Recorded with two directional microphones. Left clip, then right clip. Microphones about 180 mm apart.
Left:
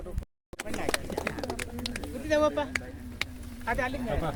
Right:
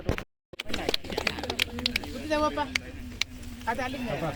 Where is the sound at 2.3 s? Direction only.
20° left (ahead or behind).